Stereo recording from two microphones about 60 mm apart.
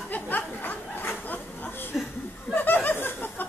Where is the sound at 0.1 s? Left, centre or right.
Left.